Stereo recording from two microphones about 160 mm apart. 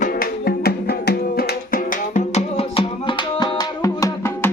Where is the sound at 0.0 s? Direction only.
70° left (ahead or behind).